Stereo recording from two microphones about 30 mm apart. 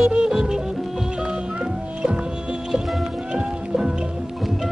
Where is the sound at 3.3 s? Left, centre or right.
Right.